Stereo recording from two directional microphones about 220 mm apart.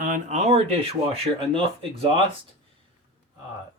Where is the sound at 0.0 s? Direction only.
35° right (ahead or behind).